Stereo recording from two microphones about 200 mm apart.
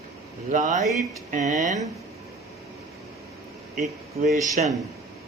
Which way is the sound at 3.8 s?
40° right (ahead or behind).